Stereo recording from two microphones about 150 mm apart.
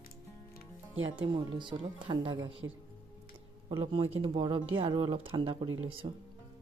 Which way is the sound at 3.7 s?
35° right (ahead or behind).